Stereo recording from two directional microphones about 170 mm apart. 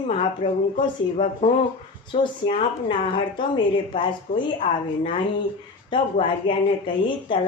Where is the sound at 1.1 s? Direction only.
40° left (ahead or behind).